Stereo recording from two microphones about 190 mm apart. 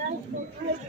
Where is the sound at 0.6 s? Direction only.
60° right (ahead or behind).